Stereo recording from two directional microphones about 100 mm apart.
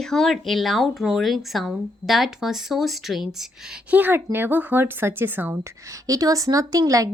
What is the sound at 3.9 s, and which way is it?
A woman's voice, 20° right (ahead or behind).